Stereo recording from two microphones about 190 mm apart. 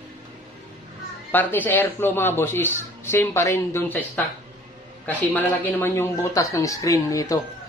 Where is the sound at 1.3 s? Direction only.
10° left (ahead or behind).